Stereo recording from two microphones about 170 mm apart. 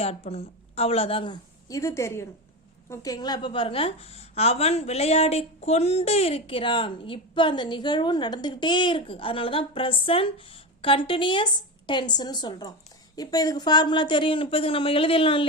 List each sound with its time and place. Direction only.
0.0 s a woman's voice: 35° left (ahead or behind)